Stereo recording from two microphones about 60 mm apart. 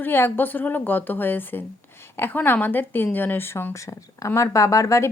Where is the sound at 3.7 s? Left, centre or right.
Left.